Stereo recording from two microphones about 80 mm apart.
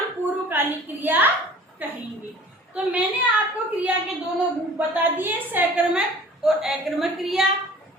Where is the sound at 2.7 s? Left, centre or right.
Centre.